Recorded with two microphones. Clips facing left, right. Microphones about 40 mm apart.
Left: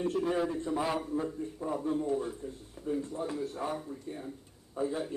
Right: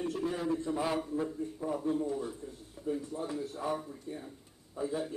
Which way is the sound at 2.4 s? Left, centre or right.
Left.